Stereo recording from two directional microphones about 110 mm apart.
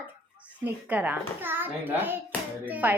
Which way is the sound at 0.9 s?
15° right (ahead or behind).